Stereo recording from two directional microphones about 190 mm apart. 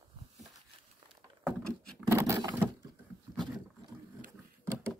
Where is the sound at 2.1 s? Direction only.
15° right (ahead or behind).